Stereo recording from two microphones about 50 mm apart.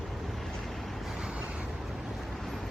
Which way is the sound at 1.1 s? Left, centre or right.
Centre.